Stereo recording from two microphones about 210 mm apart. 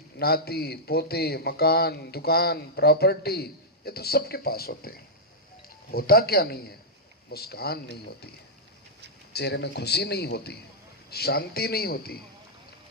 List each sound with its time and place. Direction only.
0.2 s speech: 45° left (ahead or behind)
9.3 s speech: 50° left (ahead or behind)